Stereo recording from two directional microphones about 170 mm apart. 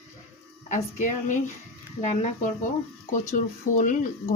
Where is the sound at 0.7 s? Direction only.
45° left (ahead or behind).